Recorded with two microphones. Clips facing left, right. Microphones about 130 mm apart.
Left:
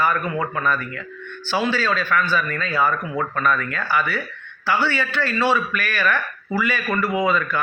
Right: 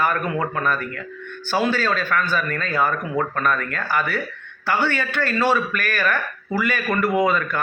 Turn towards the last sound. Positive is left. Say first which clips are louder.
# right 1 dB
turn(degrees=-50)  # may be behind; listen again after turning